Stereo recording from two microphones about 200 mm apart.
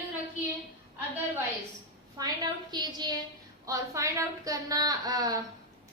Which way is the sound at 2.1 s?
20° right (ahead or behind).